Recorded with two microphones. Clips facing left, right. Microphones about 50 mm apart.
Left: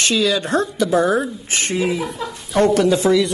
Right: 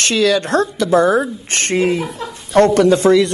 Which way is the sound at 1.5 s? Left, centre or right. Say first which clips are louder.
Right 4 dB; right.